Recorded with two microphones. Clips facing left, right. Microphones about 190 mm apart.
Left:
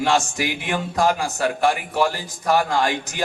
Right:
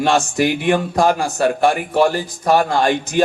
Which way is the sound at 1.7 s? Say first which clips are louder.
Right 4 dB; 60° right (ahead or behind).